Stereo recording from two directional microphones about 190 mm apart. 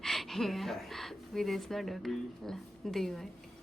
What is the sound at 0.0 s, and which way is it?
A woman's voice, centre (ahead or behind).